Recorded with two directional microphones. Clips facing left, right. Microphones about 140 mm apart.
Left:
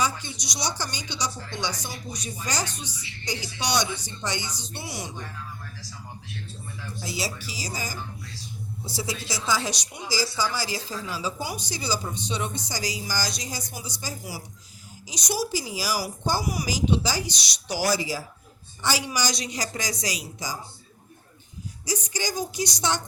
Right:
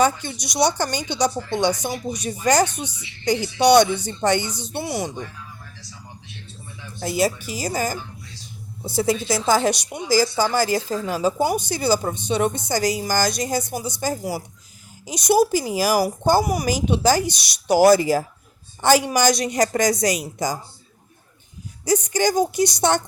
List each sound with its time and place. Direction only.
0.0 s speech: 55° right (ahead or behind)
7.0 s speech: 55° right (ahead or behind)
21.8 s speech: 55° right (ahead or behind)